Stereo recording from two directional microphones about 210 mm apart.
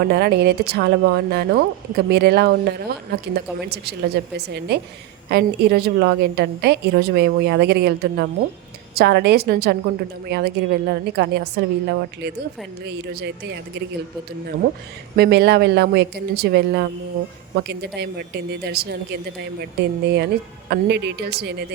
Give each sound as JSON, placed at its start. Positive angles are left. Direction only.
{"t": 0.0, "sound": "a woman's voice", "side_deg": -50}
{"t": 15.1, "sound": "a woman's voice", "side_deg": -50}